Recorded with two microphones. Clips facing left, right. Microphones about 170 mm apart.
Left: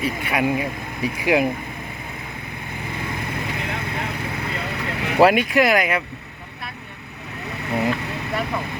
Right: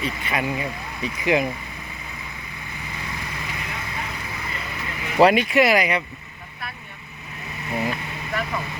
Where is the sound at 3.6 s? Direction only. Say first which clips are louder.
Left 5 dB; 60° left (ahead or behind).